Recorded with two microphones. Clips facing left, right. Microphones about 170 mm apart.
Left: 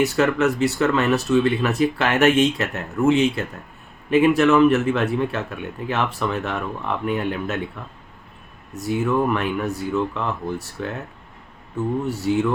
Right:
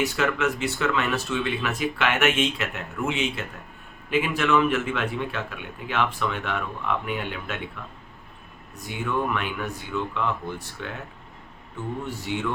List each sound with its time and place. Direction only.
0.0 s speech: 40° left (ahead or behind)
8.9 s speech: 40° left (ahead or behind)
12.0 s speech: 40° left (ahead or behind)